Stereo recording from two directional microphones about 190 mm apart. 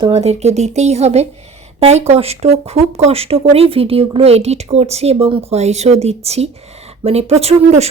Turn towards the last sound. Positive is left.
turn(degrees=-35)  # may be behind; listen again after turning